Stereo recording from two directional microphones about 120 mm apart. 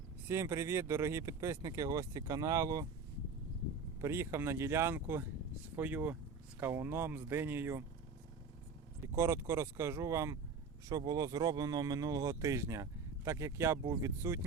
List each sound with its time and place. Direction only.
0.3 s speech: 25° right (ahead or behind)
4.0 s speech: 20° right (ahead or behind)
9.1 s speech: 20° right (ahead or behind)